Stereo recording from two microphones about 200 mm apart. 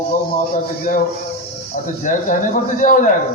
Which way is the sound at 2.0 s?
40° left (ahead or behind).